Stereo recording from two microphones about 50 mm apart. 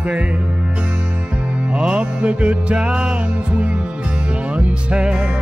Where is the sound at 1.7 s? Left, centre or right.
Right.